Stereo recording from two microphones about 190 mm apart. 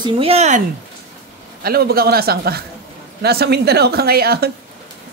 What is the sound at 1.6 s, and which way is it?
A man's voice, 55° right (ahead or behind).